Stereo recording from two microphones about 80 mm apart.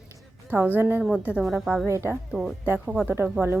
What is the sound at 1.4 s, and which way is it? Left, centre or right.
Speech, centre.